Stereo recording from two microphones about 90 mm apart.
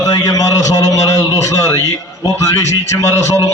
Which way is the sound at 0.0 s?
40° left (ahead or behind).